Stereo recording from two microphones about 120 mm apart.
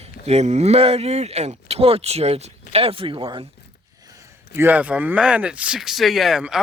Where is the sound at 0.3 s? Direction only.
65° right (ahead or behind); by 3.2 s 50° right (ahead or behind).